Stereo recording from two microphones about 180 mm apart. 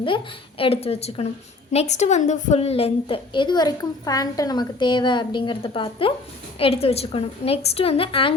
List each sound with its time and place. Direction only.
0.6 s a woman's voice: 35° left (ahead or behind)